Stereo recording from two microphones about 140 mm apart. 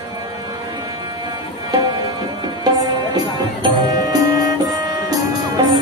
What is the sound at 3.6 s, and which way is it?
Music, 30° right (ahead or behind).